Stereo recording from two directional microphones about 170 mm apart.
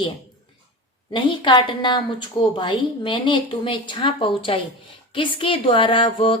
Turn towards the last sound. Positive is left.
turn(degrees=30)  # may be behind; listen again after turning